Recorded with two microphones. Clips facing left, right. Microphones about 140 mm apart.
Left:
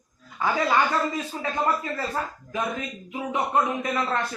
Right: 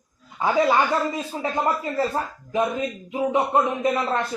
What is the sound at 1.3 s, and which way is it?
A woman's voice, 20° right (ahead or behind).